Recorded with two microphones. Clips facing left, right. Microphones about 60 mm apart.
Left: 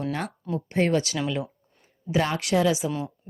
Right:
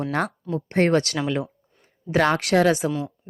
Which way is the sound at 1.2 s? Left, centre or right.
Right.